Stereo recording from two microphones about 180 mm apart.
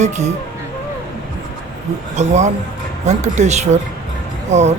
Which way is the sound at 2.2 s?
40° right (ahead or behind).